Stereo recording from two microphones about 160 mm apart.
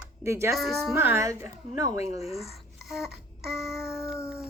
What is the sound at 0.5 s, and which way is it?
Speech, centre (ahead or behind).